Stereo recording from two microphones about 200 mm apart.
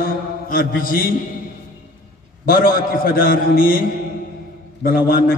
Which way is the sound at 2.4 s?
45° left (ahead or behind).